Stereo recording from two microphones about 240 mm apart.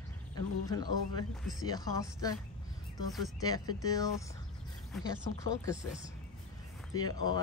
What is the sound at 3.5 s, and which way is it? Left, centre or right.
Speech, centre.